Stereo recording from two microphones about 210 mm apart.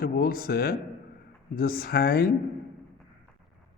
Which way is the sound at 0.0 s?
45° left (ahead or behind).